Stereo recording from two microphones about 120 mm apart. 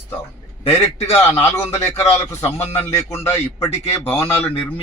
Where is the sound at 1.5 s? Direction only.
20° left (ahead or behind).